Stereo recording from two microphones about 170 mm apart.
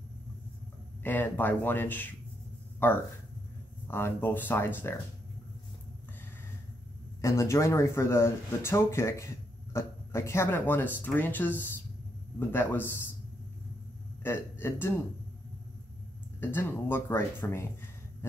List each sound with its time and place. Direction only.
1.0 s speech: 10° left (ahead or behind)
7.2 s speech: 15° left (ahead or behind)
14.2 s a man's voice: 15° left (ahead or behind)
16.3 s speech: 15° left (ahead or behind)